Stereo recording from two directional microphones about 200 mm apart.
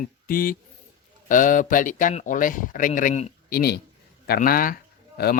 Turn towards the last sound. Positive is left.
turn(degrees=50)  # may be behind; listen again after turning